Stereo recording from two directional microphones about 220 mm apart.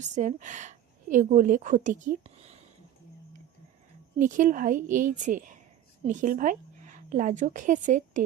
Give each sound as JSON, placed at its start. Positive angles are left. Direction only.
{"t": 0.0, "sound": "a woman's voice", "side_deg": -35}
{"t": 4.2, "sound": "a woman's voice", "side_deg": -35}